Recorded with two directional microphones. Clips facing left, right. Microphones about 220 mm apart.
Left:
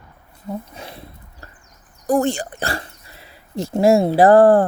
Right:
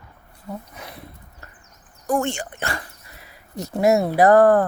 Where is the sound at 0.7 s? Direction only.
30° left (ahead or behind).